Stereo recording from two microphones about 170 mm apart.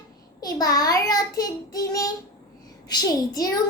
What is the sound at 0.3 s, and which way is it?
A child's voice, 20° left (ahead or behind).